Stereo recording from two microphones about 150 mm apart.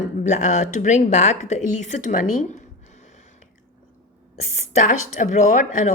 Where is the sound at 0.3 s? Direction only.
50° left (ahead or behind).